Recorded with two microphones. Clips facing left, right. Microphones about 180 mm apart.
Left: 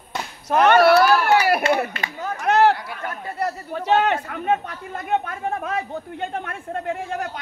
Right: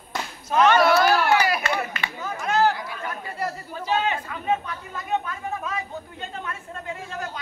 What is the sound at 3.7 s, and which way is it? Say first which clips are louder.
Speech: left 6 dB; 65° left (ahead or behind).